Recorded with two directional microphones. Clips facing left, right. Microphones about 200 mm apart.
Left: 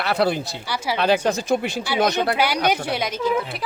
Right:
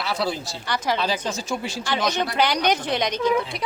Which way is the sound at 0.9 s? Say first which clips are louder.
Left 11 dB; 60° left (ahead or behind).